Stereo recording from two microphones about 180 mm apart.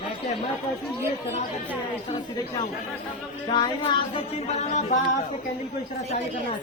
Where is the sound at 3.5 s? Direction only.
25° left (ahead or behind).